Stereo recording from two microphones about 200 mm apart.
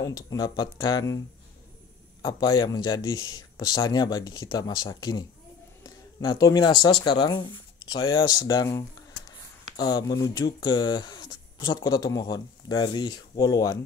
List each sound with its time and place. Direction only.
0.0 s speech: 15° left (ahead or behind)
2.2 s speech: 20° left (ahead or behind)